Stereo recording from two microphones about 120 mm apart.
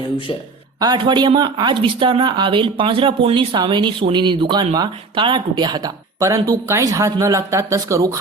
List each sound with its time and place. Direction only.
0.8 s speech: 35° right (ahead or behind)